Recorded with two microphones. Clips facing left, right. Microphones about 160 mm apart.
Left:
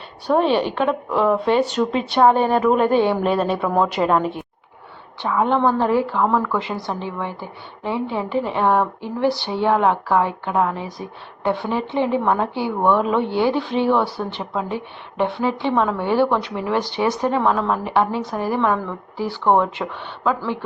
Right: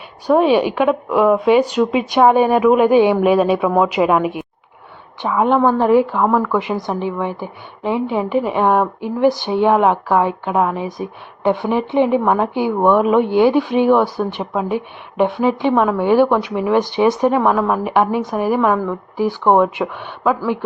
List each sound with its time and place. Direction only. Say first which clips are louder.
0.3 s speech: right 4 dB; 10° right (ahead or behind)